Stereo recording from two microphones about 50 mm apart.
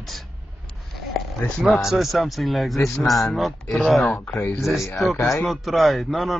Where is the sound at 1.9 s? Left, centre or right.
Centre.